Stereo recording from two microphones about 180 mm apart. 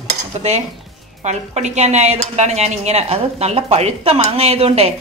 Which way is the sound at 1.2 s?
40° right (ahead or behind).